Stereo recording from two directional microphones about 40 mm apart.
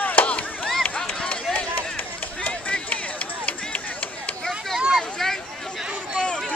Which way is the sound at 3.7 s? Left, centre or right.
Left.